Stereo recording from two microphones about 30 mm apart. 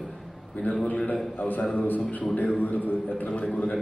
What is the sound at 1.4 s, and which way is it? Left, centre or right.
A man's voice, left.